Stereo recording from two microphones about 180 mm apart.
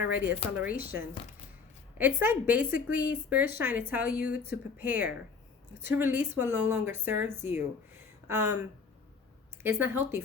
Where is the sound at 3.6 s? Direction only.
10° right (ahead or behind).